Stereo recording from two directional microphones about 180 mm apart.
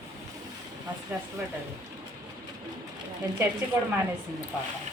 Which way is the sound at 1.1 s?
10° right (ahead or behind).